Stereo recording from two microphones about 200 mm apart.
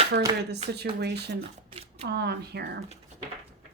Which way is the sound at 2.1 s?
55° right (ahead or behind).